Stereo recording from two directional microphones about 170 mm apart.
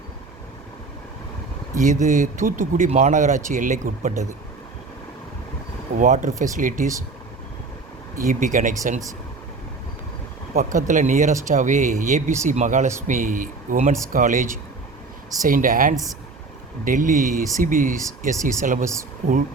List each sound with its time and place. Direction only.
1.7 s speech: 50° right (ahead or behind)
6.0 s speech: 50° right (ahead or behind)
8.1 s speech: 50° right (ahead or behind)
10.5 s speech: 50° right (ahead or behind)